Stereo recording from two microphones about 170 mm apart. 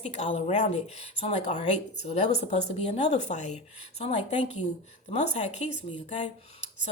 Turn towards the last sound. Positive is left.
turn(degrees=40)  # may be behind; listen again after turning